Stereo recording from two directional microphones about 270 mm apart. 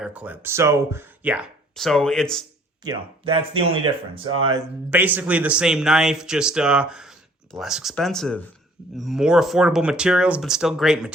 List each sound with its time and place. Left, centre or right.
0.0 s speech: centre
2.8 s speech: centre
4.9 s speech: centre